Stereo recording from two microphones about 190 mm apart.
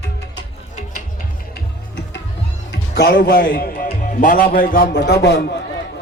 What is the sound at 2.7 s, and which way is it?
A man's voice, 60° left (ahead or behind).